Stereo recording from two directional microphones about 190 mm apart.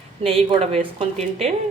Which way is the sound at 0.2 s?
30° right (ahead or behind).